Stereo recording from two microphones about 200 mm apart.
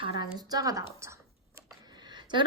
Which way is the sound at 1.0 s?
15° right (ahead or behind).